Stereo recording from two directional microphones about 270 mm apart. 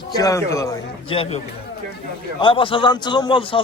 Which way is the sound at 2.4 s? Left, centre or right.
Centre.